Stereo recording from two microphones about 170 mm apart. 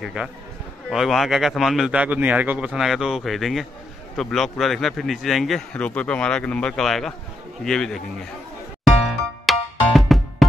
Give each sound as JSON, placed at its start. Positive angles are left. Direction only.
{"t": 0.0, "sound": "speech", "side_deg": -5}
{"t": 9.5, "sound": "music", "side_deg": 0}